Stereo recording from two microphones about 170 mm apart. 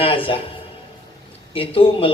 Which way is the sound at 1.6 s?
30° left (ahead or behind).